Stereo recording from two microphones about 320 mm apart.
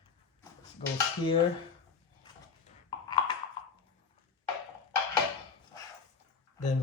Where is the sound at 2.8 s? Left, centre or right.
Centre.